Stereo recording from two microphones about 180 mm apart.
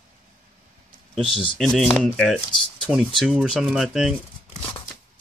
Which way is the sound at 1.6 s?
Centre (ahead or behind).